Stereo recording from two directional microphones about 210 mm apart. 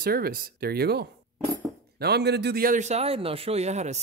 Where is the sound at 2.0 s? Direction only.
50° right (ahead or behind).